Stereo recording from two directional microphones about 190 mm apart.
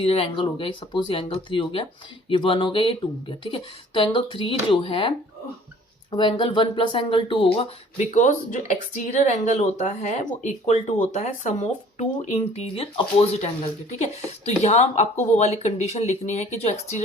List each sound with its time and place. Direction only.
0.0 s speech: 30° left (ahead or behind)